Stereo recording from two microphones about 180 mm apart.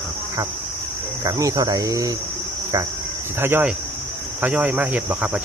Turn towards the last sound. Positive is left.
turn(degrees=-10)  # may be behind; listen again after turning